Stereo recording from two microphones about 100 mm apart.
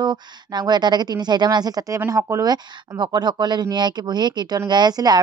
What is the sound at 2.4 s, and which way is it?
Speech, 45° right (ahead or behind).